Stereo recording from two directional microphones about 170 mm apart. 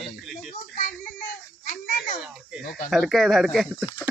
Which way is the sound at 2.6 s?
65° left (ahead or behind).